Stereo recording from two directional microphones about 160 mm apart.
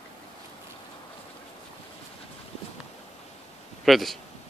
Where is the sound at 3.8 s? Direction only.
Centre (ahead or behind).